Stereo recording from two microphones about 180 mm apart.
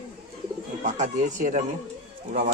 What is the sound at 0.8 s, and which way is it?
Speech, 40° right (ahead or behind).